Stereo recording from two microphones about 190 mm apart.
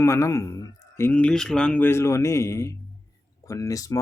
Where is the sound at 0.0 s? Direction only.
15° left (ahead or behind).